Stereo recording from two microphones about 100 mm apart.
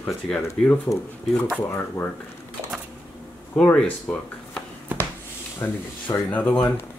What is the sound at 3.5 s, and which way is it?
Speech, 10° left (ahead or behind).